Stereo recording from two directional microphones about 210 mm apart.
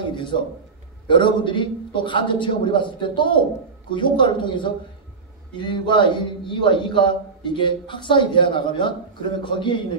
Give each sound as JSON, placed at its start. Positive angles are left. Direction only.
{"t": 0.1, "sound": "a man's voice", "side_deg": 20}